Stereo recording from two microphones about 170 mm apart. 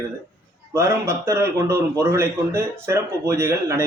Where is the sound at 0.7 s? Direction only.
15° right (ahead or behind).